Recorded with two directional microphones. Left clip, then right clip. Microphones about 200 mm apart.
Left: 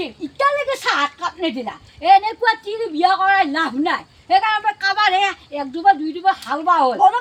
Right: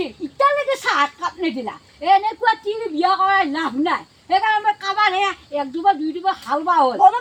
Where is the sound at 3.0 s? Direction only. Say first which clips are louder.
Left 2 dB; 20° left (ahead or behind).